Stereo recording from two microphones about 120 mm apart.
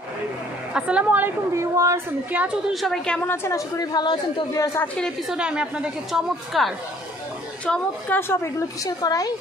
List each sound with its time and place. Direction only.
0.7 s a woman's voice: 10° right (ahead or behind)
1.5 s speech: 25° right (ahead or behind)
2.3 s a woman's voice: 15° right (ahead or behind)
2.7 s a woman's voice: centre (ahead or behind)
3.3 s a woman's voice: 25° left (ahead or behind)
5.3 s a woman's voice: 10° right (ahead or behind)
7.6 s a woman's voice: 15° left (ahead or behind); by 9.3 s 30° left (ahead or behind)